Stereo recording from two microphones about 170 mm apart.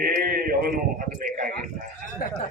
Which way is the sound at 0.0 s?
60° right (ahead or behind).